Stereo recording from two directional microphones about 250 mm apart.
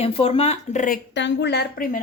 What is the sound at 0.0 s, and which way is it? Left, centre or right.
Speech, left.